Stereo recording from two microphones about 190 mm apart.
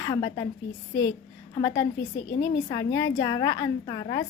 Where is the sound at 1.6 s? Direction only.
20° left (ahead or behind).